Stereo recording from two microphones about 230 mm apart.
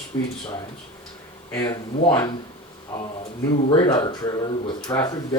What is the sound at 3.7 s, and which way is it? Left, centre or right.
Speech, left.